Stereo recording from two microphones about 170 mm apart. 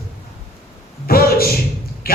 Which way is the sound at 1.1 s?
60° left (ahead or behind).